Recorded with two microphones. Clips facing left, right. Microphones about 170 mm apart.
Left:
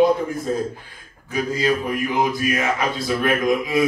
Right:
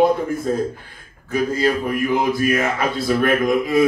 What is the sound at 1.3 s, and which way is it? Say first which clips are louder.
A man's voice: right 2 dB; 55° right (ahead or behind).